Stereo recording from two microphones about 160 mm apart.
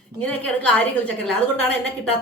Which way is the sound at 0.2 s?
10° left (ahead or behind).